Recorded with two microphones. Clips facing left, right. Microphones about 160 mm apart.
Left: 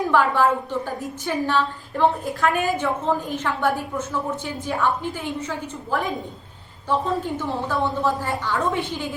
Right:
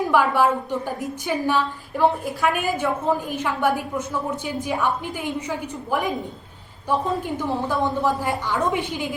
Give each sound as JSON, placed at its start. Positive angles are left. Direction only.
{"t": 0.1, "sound": "a woman's voice", "side_deg": -15}